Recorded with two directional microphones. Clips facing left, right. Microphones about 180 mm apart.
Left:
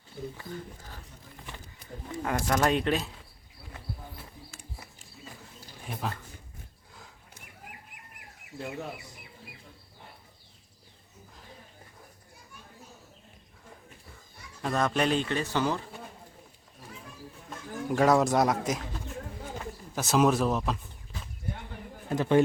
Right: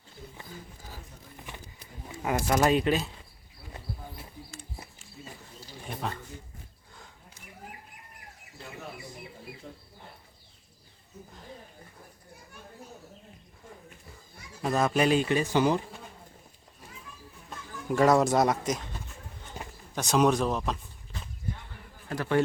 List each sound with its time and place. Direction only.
0.5 s speech: 5° right (ahead or behind)
2.2 s speech: 10° right (ahead or behind)
5.8 s a sound: centre (ahead or behind)
14.6 s speech: 5° right (ahead or behind)
17.5 s speech: centre (ahead or behind)
20.0 s speech: centre (ahead or behind)
22.1 s a man's voice: 20° left (ahead or behind)